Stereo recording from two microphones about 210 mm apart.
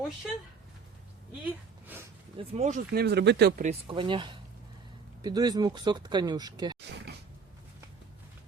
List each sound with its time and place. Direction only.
0.2 s speech: centre (ahead or behind)
2.4 s speech: 30° right (ahead or behind); by 3.5 s 55° right (ahead or behind)
3.6 s speech: 30° right (ahead or behind)